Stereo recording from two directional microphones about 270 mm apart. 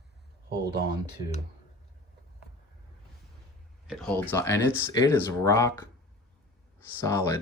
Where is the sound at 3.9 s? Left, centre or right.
Centre.